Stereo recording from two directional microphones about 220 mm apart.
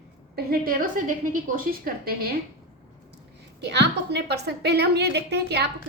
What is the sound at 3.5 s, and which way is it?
A woman's voice, 50° right (ahead or behind).